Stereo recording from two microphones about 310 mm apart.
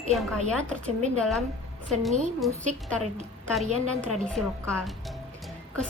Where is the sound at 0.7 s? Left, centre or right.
Right.